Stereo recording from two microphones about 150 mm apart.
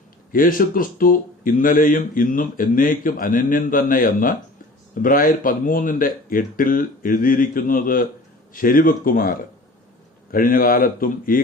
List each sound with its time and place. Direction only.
0.3 s speech: 70° left (ahead or behind)